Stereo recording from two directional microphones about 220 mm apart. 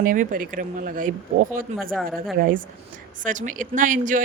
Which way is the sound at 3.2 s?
35° right (ahead or behind).